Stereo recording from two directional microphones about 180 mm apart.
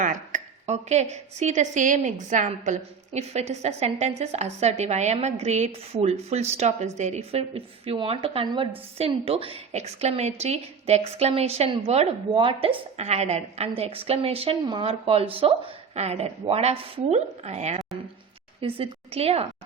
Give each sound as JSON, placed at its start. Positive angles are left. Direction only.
{"t": 0.0, "sound": "a woman's voice", "side_deg": -45}